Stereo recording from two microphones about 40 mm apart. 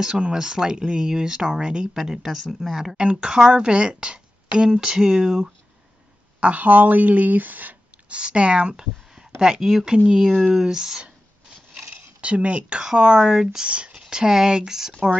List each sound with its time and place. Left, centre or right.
0.0 s speech: centre
2.0 s speech: centre
3.0 s a woman's voice: right
6.4 s speech: right
8.1 s a woman's voice: right; by 9.9 s centre
9.9 s a woman's voice: right
10.2 s speech: centre
11.7 s speech: right; by 13.7 s centre
13.7 s speech: right
14.0 s speech: centre